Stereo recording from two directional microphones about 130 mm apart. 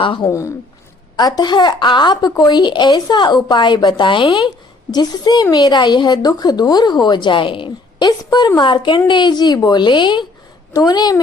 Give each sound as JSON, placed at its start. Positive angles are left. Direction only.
{"t": 0.0, "sound": "a woman's voice", "side_deg": 40}
{"t": 0.3, "sound": "a woman's voice", "side_deg": 25}